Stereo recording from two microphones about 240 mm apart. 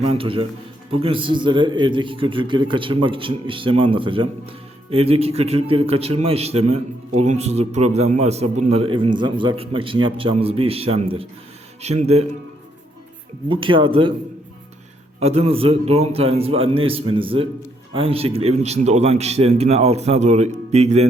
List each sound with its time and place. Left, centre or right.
0.0 s a man's voice: right
13.5 s a man's voice: right
15.2 s a man's voice: right